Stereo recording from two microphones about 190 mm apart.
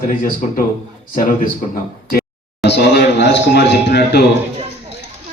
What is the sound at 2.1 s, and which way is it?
A man's voice, 60° left (ahead or behind).